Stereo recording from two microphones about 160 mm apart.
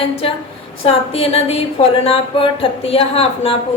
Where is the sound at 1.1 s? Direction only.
40° left (ahead or behind).